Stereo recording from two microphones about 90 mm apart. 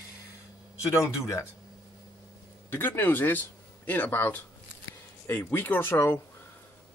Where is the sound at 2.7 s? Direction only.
20° left (ahead or behind).